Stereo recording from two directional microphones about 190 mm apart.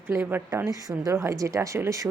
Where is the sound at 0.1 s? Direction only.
10° right (ahead or behind).